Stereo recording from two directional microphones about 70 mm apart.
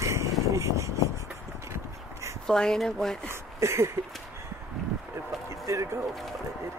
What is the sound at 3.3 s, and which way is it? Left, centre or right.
Speech, right.